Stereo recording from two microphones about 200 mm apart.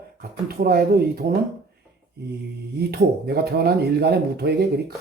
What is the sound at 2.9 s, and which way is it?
Speech, 55° right (ahead or behind).